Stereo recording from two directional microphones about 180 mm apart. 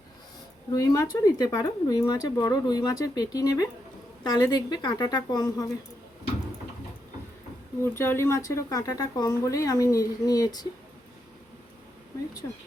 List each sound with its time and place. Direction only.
0.7 s speech: 20° left (ahead or behind)
7.9 s speech: 15° left (ahead or behind)